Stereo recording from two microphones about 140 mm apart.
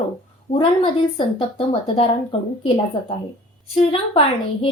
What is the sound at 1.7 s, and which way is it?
A woman's voice, 45° left (ahead or behind).